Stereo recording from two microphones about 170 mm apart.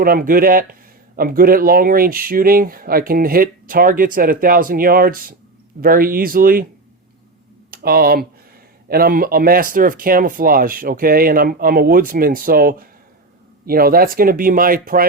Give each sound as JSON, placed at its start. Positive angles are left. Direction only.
{"t": 0.0, "sound": "speech", "side_deg": -60}
{"t": 7.7, "sound": "speech", "side_deg": -60}